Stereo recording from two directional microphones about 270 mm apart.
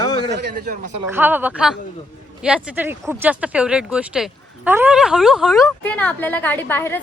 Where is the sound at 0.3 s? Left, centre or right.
Right.